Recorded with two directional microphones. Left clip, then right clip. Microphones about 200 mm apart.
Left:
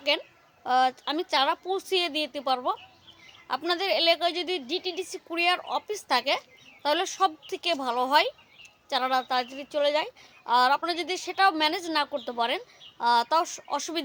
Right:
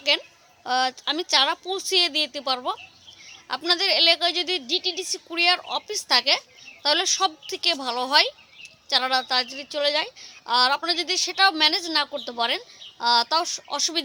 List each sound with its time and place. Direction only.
0.1 s a woman's voice: centre (ahead or behind)